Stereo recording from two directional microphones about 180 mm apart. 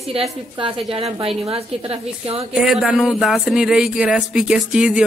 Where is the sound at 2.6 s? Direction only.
Centre (ahead or behind).